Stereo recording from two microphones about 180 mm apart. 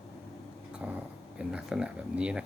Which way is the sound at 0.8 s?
5° right (ahead or behind).